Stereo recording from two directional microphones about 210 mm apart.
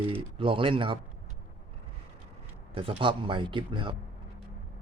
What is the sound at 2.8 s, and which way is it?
Speech, 25° right (ahead or behind).